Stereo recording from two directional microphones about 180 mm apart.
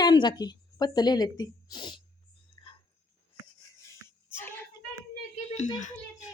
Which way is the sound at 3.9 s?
15° left (ahead or behind).